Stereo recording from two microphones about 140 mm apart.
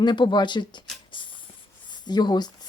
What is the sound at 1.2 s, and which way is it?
Shuffle, 35° left (ahead or behind).